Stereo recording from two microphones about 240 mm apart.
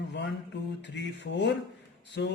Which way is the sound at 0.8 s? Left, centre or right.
Left.